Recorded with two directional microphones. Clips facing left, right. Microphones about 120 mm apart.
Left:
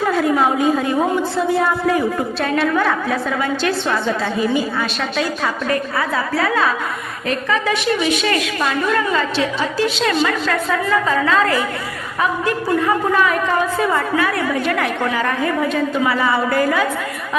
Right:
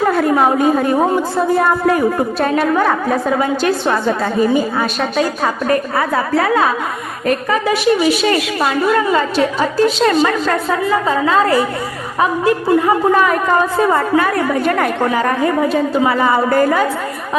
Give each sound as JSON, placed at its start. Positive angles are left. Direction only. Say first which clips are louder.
{"t": 0.0, "sound": "a woman's voice", "louder": "right 3 dB", "side_deg": -55}